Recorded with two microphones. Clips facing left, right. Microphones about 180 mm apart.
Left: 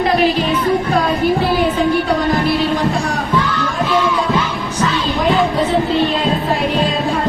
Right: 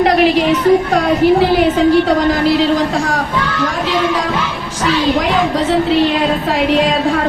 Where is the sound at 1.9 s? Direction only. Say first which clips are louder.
Right 4 dB; 90° right.